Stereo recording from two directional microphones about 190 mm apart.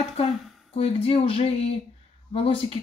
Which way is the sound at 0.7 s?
30° left (ahead or behind).